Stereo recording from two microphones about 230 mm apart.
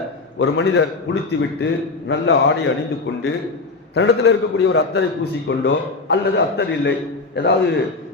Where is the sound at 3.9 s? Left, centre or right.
Left.